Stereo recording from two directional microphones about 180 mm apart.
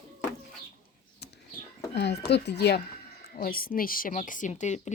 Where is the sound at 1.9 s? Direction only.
70° left (ahead or behind).